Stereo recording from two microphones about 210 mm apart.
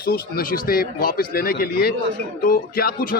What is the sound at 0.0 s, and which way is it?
Speech, 45° left (ahead or behind).